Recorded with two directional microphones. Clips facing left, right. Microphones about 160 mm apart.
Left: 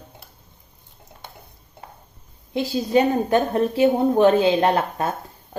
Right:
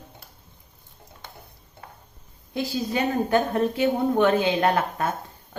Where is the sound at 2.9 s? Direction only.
35° left (ahead or behind).